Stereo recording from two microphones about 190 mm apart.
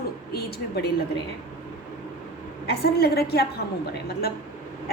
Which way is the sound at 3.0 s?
55° left (ahead or behind).